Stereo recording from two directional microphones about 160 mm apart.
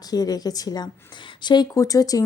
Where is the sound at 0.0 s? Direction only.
25° left (ahead or behind).